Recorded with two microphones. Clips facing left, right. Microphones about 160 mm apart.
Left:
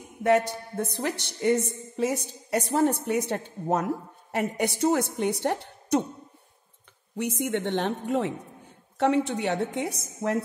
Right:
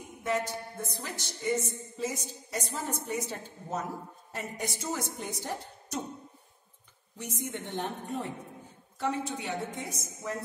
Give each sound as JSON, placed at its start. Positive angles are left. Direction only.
{"t": 0.2, "sound": "a woman's voice", "side_deg": 65}
{"t": 7.2, "sound": "a woman's voice", "side_deg": 75}
{"t": 8.9, "sound": "a woman's voice", "side_deg": 70}